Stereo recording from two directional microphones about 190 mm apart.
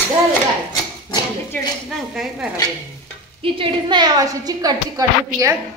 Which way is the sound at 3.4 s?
25° right (ahead or behind).